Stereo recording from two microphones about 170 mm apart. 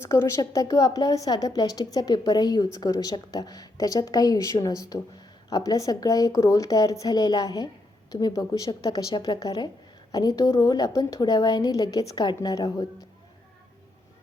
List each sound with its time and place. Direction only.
0.0 s a woman's voice: 15° left (ahead or behind)